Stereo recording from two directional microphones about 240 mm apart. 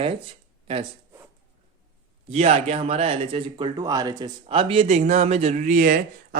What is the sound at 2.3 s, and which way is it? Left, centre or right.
A man's voice, right.